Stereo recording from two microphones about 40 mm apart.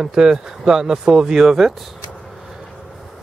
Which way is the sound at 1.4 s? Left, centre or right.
Centre.